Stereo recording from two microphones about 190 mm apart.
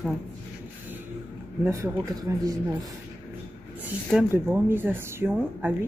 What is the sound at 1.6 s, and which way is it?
Speech, 15° right (ahead or behind).